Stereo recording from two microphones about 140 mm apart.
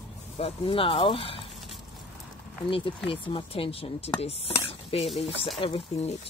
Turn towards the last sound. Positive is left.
turn(degrees=45)  # may be behind; listen again after turning